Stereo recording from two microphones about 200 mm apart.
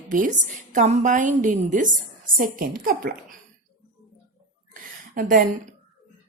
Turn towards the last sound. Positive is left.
turn(degrees=-45)  # may be behind; listen again after turning